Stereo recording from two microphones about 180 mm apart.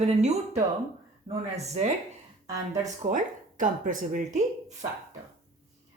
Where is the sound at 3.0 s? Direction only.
45° right (ahead or behind).